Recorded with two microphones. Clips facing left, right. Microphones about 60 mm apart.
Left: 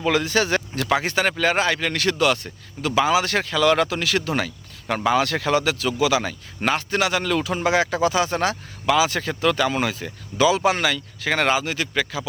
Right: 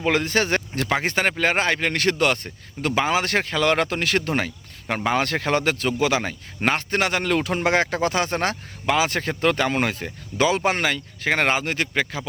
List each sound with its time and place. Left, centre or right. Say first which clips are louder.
0.0 s speech: left 1 dB; right